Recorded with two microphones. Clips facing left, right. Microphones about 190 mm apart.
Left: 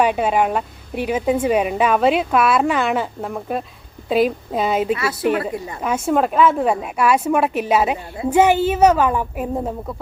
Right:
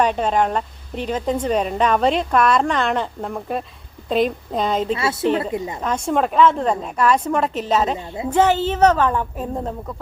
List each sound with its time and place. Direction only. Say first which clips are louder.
0.0 s speech: left 1 dB; 10° left (ahead or behind)
4.9 s a woman's voice: even; 25° right (ahead or behind)
5.8 s speech: left 3 dB; 5° left (ahead or behind)